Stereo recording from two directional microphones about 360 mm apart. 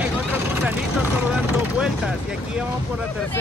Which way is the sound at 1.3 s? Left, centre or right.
Centre.